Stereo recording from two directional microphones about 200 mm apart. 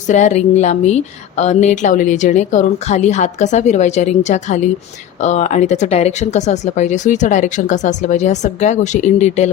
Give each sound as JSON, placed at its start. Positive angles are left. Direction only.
{"t": 0.1, "sound": "speech", "side_deg": 35}